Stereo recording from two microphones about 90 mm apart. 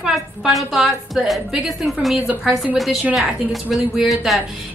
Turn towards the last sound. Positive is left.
turn(degrees=0)  # may be behind; listen again after turning